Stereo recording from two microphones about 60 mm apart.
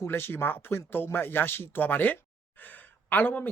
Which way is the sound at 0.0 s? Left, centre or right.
Left.